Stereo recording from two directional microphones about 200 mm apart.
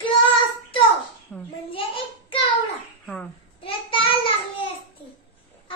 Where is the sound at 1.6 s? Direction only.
25° left (ahead or behind).